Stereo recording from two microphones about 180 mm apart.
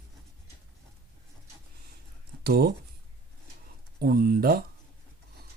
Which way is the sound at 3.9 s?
60° right (ahead or behind).